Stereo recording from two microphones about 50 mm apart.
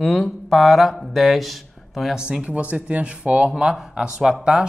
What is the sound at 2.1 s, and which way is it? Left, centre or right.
Speech, centre.